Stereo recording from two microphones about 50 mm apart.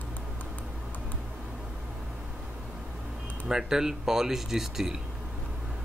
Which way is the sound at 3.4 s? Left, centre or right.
Centre.